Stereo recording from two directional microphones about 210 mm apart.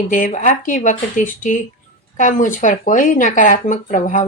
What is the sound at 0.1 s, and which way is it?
Speech, 40° left (ahead or behind).